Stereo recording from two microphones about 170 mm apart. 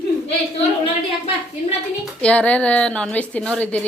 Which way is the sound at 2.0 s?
5° left (ahead or behind).